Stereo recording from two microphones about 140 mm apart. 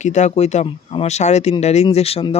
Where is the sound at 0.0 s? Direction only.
60° left (ahead or behind).